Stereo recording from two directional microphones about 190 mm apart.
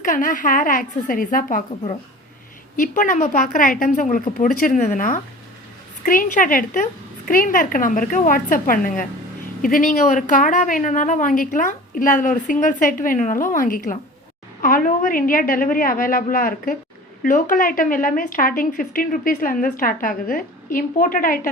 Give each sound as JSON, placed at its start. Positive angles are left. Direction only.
{"t": 0.0, "sound": "speech", "side_deg": 45}
{"t": 2.7, "sound": "speech", "side_deg": 45}